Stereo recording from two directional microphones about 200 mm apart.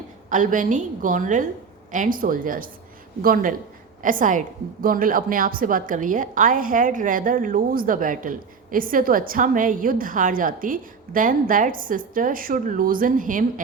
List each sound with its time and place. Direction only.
0.3 s a woman's voice: 40° right (ahead or behind)